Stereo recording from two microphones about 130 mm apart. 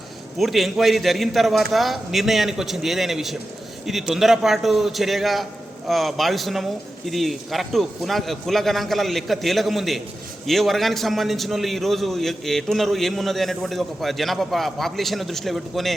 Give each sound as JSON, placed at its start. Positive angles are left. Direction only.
{"t": 0.3, "sound": "a man's voice", "side_deg": 0}